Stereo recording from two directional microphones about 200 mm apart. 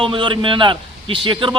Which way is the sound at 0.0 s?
25° right (ahead or behind).